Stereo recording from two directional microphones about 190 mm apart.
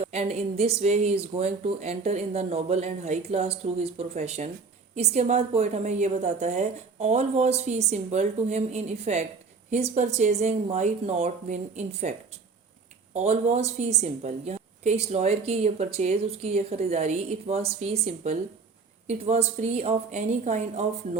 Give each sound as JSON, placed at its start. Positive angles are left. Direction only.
{"t": 0.0, "sound": "a woman's voice", "side_deg": -35}
{"t": 13.1, "sound": "a woman's voice", "side_deg": -35}